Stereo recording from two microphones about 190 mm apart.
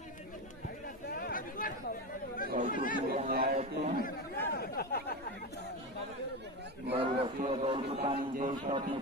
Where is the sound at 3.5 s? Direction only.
35° right (ahead or behind).